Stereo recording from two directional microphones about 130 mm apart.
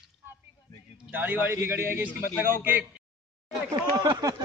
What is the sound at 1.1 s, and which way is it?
Speech, 15° right (ahead or behind).